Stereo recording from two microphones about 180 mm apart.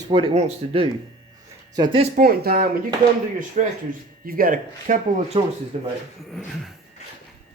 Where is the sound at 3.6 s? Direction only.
45° right (ahead or behind).